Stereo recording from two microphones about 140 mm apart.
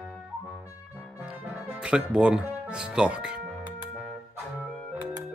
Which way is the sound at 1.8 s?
5° right (ahead or behind).